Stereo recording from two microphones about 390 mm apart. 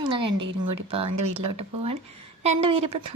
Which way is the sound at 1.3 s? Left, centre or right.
Centre.